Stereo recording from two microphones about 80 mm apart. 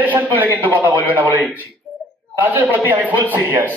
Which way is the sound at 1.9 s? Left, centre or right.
Centre.